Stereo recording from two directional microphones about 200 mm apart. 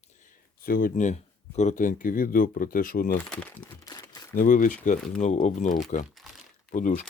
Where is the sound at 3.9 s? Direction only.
20° left (ahead or behind).